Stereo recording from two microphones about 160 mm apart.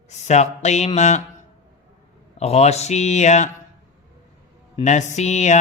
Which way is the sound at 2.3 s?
40° left (ahead or behind).